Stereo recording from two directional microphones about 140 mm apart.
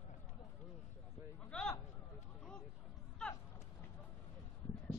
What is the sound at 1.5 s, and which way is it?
Speech, 5° left (ahead or behind).